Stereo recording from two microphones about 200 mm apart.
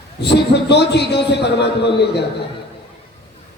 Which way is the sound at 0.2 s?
55° left (ahead or behind).